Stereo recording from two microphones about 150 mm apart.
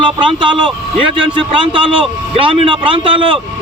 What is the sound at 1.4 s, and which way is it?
A man's voice, 35° right (ahead or behind).